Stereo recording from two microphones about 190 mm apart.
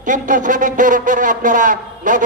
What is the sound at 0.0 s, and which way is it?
Speech, 40° right (ahead or behind).